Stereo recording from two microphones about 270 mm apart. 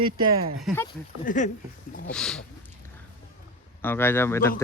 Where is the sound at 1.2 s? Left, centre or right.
Left.